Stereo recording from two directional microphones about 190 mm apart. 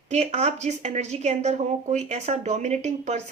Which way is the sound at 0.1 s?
35° right (ahead or behind).